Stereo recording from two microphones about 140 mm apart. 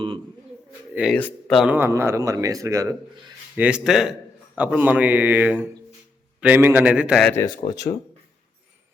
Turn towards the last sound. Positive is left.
turn(degrees=25)  # may be behind; listen again after turning